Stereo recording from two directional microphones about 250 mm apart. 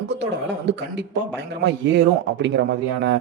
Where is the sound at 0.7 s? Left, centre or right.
Right.